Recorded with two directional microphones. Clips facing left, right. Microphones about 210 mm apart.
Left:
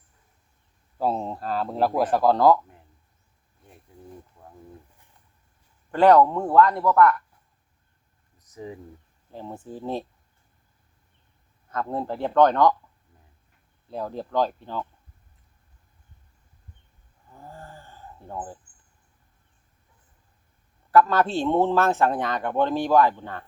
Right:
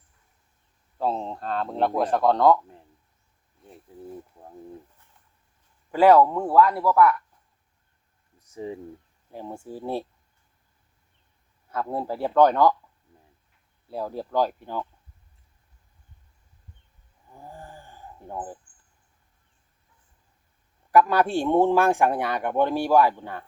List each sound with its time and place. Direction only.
0.9 s speech: 5° left (ahead or behind)
4.4 s a sound: 30° right (ahead or behind)
5.9 s speech: 5° right (ahead or behind)
8.4 s speech: 30° right (ahead or behind)
9.3 s a man's voice: 10° right (ahead or behind)
11.7 s a man's voice: 10° right (ahead or behind)
13.9 s a man's voice: 10° right (ahead or behind)
17.2 s speech: 15° right (ahead or behind)
20.9 s a man's voice: 15° right (ahead or behind)